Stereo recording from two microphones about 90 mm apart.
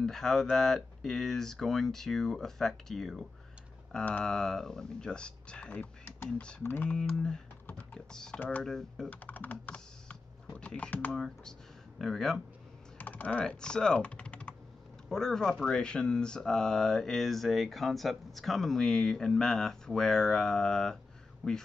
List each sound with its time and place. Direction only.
0.0 s mantra: 5° left (ahead or behind)
3.9 s speech: 10° left (ahead or behind)
7.6 s computer keyboard: 20° left (ahead or behind)
8.1 s speech: 10° left (ahead or behind)
8.6 s mantra: 5° left (ahead or behind)
9.1 s typing: 20° left (ahead or behind)
12.0 s mantra: 5° left (ahead or behind)
12.9 s speech: 15° left (ahead or behind)
15.0 s mantra: 5° left (ahead or behind)